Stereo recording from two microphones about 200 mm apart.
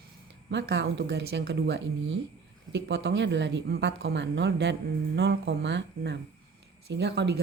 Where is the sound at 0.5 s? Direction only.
60° right (ahead or behind).